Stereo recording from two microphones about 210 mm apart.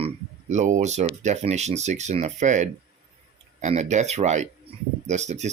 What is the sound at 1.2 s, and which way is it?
Speech, 35° right (ahead or behind).